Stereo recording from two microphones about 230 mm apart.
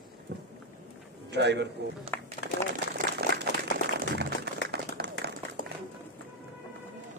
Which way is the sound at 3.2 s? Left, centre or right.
Right.